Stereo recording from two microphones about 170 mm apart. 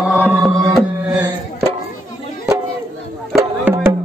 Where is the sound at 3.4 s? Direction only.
15° right (ahead or behind).